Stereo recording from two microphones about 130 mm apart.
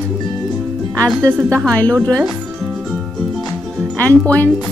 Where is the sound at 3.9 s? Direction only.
10° left (ahead or behind).